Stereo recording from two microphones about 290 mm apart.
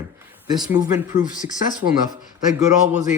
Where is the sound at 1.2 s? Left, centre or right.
Left.